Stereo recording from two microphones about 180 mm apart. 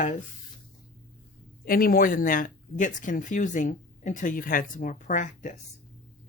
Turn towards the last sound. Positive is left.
turn(degrees=45)  # may be behind; listen again after turning